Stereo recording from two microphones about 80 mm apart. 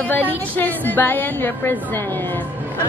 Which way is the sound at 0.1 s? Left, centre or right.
Left.